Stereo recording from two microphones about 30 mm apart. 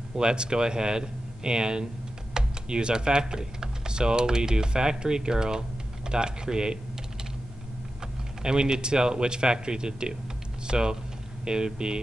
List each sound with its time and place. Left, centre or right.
0.1 s speech: right
8.4 s speech: right